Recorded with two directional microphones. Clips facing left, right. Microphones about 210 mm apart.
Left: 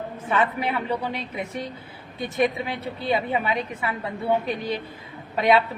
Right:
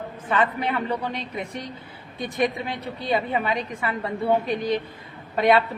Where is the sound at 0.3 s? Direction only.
10° left (ahead or behind).